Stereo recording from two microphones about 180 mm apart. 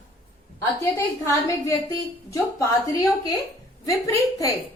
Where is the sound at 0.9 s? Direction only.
15° left (ahead or behind).